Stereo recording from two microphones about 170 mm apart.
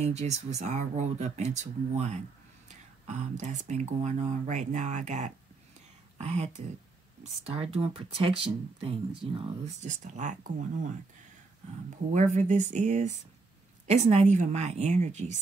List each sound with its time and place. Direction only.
0.0 s speech: 40° right (ahead or behind)
9.8 s speech: 45° right (ahead or behind)